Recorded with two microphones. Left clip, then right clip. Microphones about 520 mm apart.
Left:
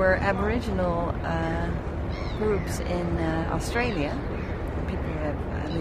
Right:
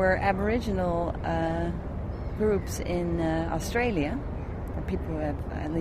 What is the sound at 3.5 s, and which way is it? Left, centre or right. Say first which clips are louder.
Speech: even; right.